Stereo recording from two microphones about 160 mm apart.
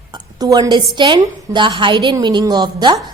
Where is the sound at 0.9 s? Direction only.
30° right (ahead or behind).